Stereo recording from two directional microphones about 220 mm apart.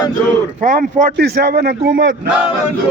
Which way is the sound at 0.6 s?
35° right (ahead or behind).